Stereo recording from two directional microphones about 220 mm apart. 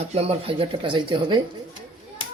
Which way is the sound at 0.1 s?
25° right (ahead or behind).